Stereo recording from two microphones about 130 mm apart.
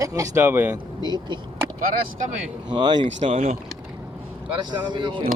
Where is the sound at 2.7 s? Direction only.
35° right (ahead or behind).